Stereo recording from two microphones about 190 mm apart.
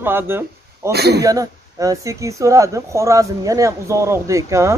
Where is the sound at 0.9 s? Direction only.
60° right (ahead or behind).